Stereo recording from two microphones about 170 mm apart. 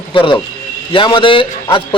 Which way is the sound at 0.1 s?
30° left (ahead or behind).